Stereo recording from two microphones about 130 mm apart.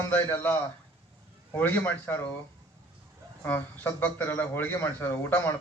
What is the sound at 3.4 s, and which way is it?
A man's voice, 15° left (ahead or behind).